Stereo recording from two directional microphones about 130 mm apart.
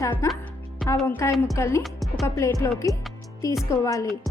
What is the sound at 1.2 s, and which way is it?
Speech, 25° left (ahead or behind).